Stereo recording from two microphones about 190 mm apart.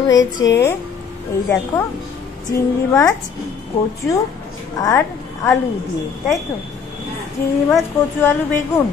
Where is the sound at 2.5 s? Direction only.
20° left (ahead or behind).